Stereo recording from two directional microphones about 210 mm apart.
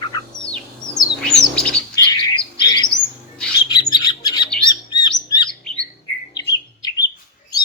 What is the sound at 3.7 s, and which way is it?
Bird, 20° left (ahead or behind).